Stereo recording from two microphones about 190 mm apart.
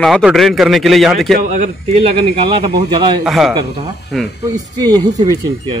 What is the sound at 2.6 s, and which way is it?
Speech, 25° right (ahead or behind).